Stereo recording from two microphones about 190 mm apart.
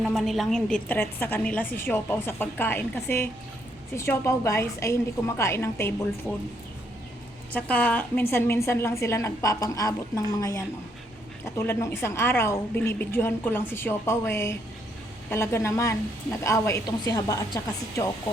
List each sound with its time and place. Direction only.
0.0 s a woman's voice: centre (ahead or behind)
7.5 s a woman's voice: 5° left (ahead or behind)